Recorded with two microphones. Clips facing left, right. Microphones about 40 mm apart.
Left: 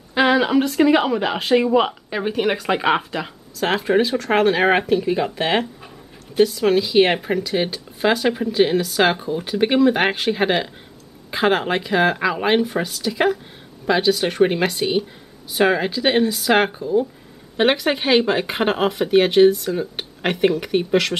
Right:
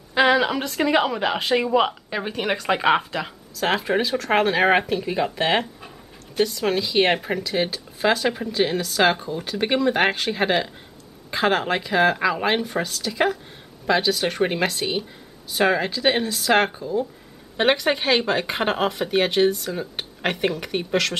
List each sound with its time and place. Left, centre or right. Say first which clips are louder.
0.1 s speech: left 2 dB; centre